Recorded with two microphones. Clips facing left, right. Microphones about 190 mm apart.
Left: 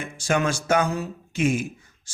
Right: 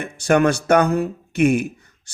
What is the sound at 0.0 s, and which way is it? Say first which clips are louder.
Speech: right 7 dB; 60° right (ahead or behind).